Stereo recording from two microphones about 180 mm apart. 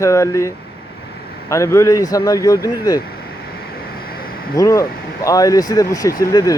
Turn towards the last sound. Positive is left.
turn(degrees=20)  # may be behind; listen again after turning